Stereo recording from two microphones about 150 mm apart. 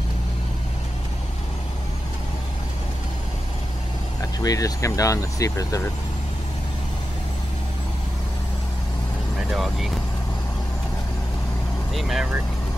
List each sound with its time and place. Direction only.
4.2 s speech: 25° left (ahead or behind)
9.5 s speech: centre (ahead or behind)
11.9 s vehicle: centre (ahead or behind)